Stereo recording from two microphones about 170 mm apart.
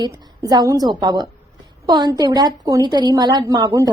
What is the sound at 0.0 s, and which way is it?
A woman's voice, 25° right (ahead or behind).